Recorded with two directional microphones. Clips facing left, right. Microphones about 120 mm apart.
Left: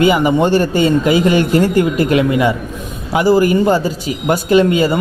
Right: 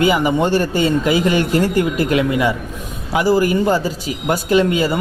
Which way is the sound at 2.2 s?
20° left (ahead or behind).